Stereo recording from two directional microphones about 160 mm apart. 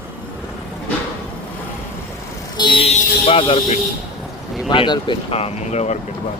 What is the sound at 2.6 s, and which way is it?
Speech, 30° left (ahead or behind).